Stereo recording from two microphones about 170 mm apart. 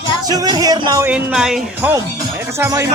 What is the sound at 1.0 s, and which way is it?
Speech, 10° right (ahead or behind).